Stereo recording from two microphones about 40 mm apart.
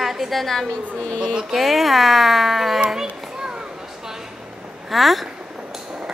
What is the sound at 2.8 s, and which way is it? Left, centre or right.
Children playing, centre.